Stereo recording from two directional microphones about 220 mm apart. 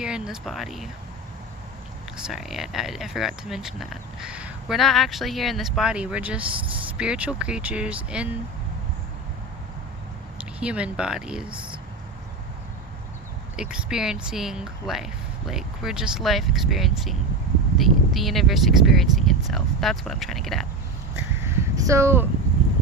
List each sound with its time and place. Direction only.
0.0 s speech: 5° right (ahead or behind)
2.2 s speech: centre (ahead or behind)
10.6 s speech: 5° right (ahead or behind)
13.6 s speech: 5° right (ahead or behind)
21.2 s a sound: 10° right (ahead or behind)